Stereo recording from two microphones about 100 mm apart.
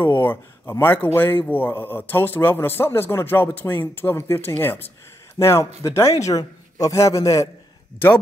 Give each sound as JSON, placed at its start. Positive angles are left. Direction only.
{"t": 0.0, "sound": "a man's voice", "side_deg": 20}